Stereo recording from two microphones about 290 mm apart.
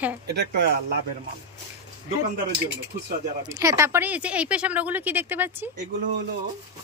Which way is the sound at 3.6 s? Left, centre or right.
Centre.